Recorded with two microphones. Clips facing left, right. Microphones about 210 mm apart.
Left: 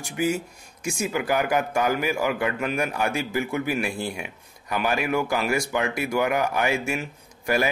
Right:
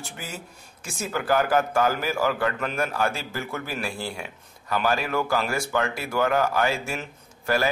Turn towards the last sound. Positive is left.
turn(degrees=15)  # may be behind; listen again after turning